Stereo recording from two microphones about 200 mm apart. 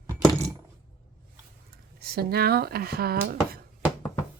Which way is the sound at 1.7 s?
50° right (ahead or behind).